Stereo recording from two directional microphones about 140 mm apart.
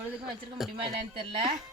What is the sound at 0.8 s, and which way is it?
Speech, 40° right (ahead or behind).